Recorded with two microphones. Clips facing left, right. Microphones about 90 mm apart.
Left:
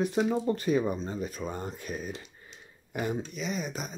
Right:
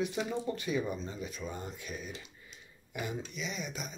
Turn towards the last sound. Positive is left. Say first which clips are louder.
# left 6 dB
turn(degrees=40)  # may be behind; listen again after turning